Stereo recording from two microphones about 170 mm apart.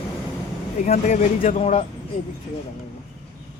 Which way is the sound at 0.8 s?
45° left (ahead or behind).